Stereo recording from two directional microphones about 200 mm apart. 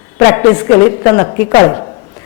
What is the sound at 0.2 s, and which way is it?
A man's voice, 15° left (ahead or behind).